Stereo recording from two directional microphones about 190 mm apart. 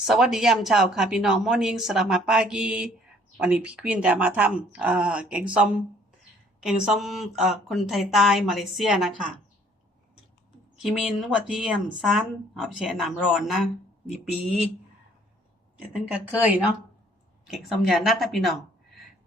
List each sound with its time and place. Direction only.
0.0 s speech: centre (ahead or behind)
10.8 s speech: 5° right (ahead or behind)
16.0 s speech: 5° right (ahead or behind)